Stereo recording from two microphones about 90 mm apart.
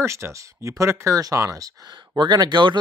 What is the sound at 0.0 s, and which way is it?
Speech, 30° right (ahead or behind).